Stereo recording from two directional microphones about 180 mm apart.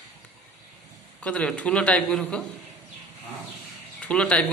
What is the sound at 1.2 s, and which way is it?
A man's voice, 5° left (ahead or behind).